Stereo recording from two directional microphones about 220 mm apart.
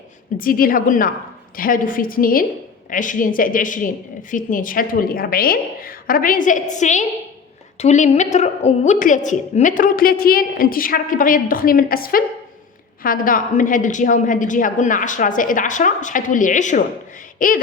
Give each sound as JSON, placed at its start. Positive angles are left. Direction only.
{"t": 0.3, "sound": "a woman's voice", "side_deg": 40}